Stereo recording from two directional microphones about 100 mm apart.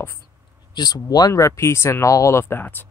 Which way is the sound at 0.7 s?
45° left (ahead or behind).